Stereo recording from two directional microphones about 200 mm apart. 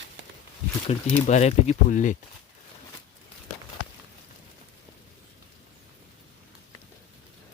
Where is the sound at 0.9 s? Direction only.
30° left (ahead or behind).